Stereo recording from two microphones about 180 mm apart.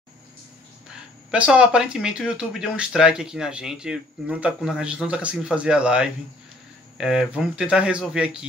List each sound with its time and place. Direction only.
1.3 s speech: 5° right (ahead or behind)